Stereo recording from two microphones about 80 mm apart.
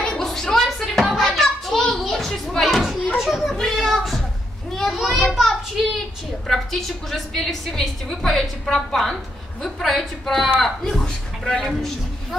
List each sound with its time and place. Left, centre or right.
0.0 s hands: centre
3.2 s a sound: centre
4.7 s children playing: centre
6.4 s a woman's voice: centre